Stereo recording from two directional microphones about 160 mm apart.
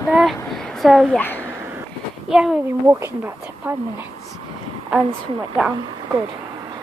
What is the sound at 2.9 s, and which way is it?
Speech, 15° right (ahead or behind).